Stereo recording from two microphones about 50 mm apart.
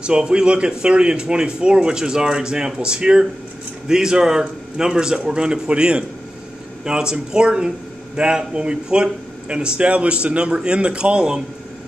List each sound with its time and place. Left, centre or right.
0.0 s a man's voice: centre